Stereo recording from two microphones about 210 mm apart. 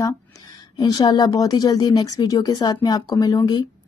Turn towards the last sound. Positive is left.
turn(degrees=20)  # may be behind; listen again after turning